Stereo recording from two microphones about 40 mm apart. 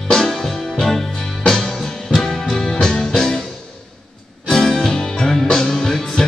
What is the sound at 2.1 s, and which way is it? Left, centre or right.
Music, centre.